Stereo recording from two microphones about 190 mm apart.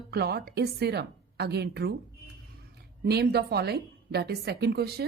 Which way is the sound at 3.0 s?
55° right (ahead or behind).